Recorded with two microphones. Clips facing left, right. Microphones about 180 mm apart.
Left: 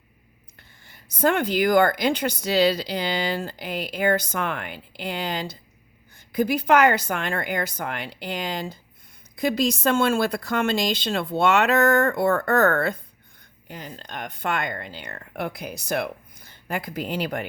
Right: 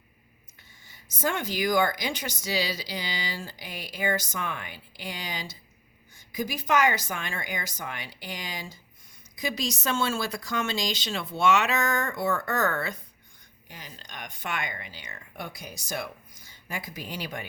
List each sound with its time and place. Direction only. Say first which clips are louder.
0.9 s a woman's voice: left 8 dB; 60° left (ahead or behind)